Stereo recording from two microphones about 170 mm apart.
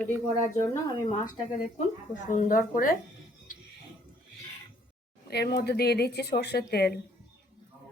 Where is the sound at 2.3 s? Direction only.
50° left (ahead or behind).